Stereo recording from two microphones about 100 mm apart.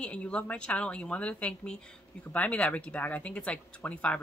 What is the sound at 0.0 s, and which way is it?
Speech, 10° left (ahead or behind).